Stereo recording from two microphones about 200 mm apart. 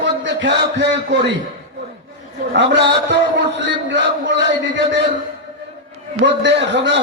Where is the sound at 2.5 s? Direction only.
60° right (ahead or behind).